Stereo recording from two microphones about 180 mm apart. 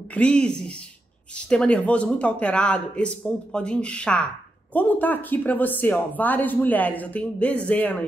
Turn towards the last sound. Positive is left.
turn(degrees=10)  # may be behind; listen again after turning